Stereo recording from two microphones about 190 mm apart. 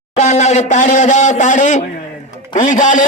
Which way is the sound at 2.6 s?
40° left (ahead or behind).